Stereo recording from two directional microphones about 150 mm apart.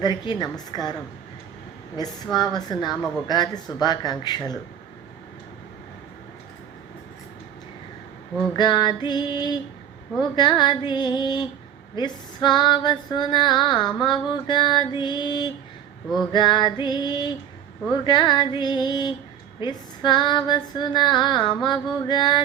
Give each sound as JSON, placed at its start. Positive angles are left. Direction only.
{"t": 0.0, "sound": "female singing", "side_deg": 30}
{"t": 2.0, "sound": "female singing", "side_deg": 25}
{"t": 8.5, "sound": "female singing", "side_deg": 30}